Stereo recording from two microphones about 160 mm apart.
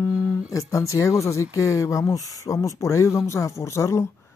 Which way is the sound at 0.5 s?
20° left (ahead or behind).